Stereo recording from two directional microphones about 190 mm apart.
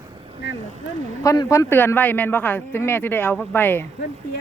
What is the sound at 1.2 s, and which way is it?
Speech, 15° left (ahead or behind).